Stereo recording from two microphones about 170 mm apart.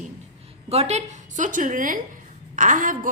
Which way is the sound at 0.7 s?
40° right (ahead or behind).